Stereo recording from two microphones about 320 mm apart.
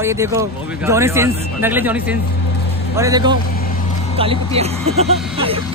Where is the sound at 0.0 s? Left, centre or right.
Centre.